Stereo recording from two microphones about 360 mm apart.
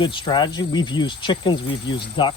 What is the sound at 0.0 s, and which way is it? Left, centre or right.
Speech, centre.